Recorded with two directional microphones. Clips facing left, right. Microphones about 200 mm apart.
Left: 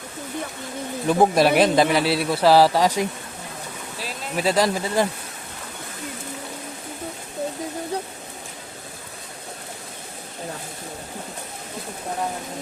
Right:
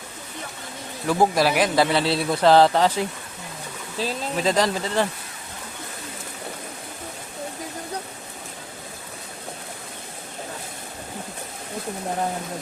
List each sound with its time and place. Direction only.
1.0 s speech: 20° left (ahead or behind)
4.4 s speech: 10° left (ahead or behind)